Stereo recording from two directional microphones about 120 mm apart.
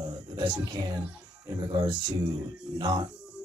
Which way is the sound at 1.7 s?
40° right (ahead or behind).